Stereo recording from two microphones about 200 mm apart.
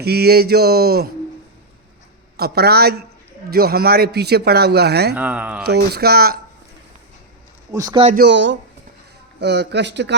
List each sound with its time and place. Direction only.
0.0 s a man's voice: 55° right (ahead or behind)
2.4 s a man's voice: 50° right (ahead or behind)
5.1 s speech: 10° right (ahead or behind)
5.6 s a man's voice: 55° right (ahead or behind)
7.7 s a man's voice: 20° right (ahead or behind)
8.2 s speech: 65° right (ahead or behind)